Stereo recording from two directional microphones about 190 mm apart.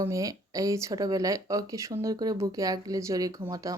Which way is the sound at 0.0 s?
15° right (ahead or behind).